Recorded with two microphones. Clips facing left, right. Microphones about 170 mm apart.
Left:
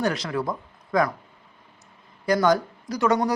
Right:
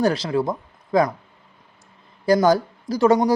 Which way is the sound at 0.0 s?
30° right (ahead or behind).